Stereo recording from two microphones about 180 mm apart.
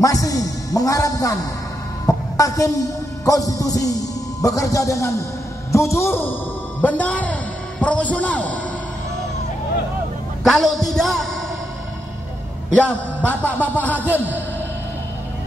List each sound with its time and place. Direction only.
0.0 s a man's voice: 20° left (ahead or behind)
10.4 s a man's voice: centre (ahead or behind)
12.6 s a man's voice: 5° left (ahead or behind)
13.9 s a man's voice: 10° right (ahead or behind)